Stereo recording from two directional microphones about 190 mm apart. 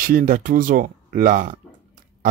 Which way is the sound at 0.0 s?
45° right (ahead or behind).